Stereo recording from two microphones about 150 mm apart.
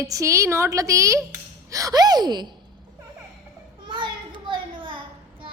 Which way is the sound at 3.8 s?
30° right (ahead or behind).